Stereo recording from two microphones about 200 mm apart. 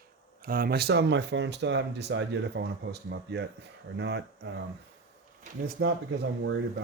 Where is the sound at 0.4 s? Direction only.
45° right (ahead or behind).